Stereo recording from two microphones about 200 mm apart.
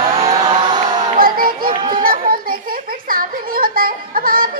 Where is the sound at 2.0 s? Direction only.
45° right (ahead or behind).